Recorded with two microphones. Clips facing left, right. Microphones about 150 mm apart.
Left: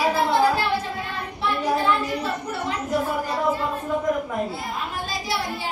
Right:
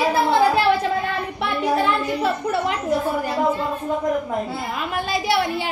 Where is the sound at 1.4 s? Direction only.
65° right (ahead or behind).